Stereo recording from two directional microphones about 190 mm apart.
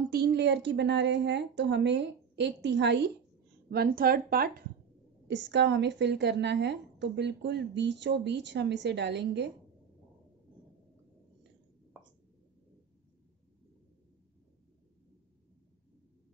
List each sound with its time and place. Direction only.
0.1 s a woman's voice: 60° right (ahead or behind)
3.7 s speech: 55° right (ahead or behind)
5.3 s a woman's voice: 70° right (ahead or behind)